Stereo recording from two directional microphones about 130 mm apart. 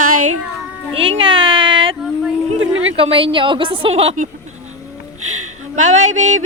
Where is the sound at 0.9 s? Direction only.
45° right (ahead or behind).